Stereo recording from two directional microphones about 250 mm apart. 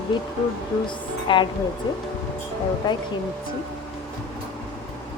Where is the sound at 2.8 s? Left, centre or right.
Centre.